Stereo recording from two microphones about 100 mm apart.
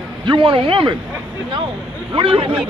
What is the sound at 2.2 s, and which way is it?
Speech, 60° right (ahead or behind).